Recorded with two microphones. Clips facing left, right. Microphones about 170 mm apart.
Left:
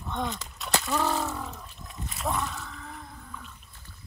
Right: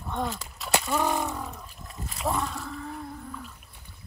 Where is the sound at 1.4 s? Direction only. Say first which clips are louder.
Right 1 dB; centre (ahead or behind).